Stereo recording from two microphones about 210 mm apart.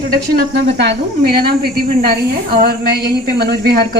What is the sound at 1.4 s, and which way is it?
A woman's voice, 45° right (ahead or behind).